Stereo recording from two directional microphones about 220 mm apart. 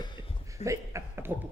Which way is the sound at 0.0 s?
20° left (ahead or behind).